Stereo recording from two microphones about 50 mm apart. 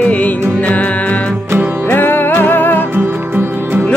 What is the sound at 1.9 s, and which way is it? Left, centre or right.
Music, left.